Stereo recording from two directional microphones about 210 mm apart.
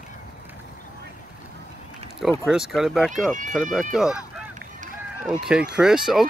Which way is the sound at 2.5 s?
Centre (ahead or behind).